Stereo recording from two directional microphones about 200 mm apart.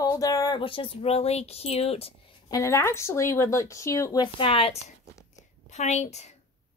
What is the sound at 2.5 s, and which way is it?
A woman's voice, 15° left (ahead or behind).